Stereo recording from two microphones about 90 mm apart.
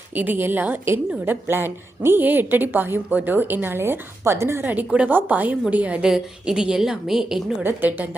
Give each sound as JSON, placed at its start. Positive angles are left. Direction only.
{"t": 0.2, "sound": "a woman's voice", "side_deg": -25}
{"t": 4.7, "sound": "a woman's voice", "side_deg": -15}
{"t": 7.6, "sound": "a woman's voice", "side_deg": -20}